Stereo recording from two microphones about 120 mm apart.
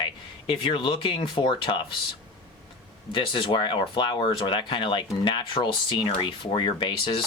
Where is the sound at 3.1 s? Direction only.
45° left (ahead or behind).